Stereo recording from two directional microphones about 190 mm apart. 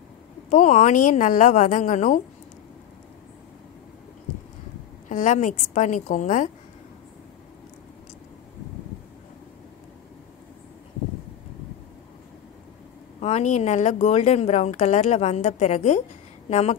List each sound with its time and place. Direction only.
0.5 s a woman's voice: 40° left (ahead or behind)
5.0 s a woman's voice: 40° left (ahead or behind)
13.2 s a woman's voice: 35° left (ahead or behind)